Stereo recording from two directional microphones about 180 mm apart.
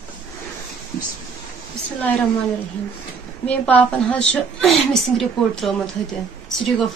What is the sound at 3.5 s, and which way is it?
A woman's voice, 5° left (ahead or behind).